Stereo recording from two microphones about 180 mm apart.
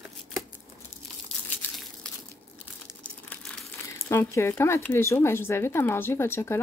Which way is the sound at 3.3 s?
10° left (ahead or behind).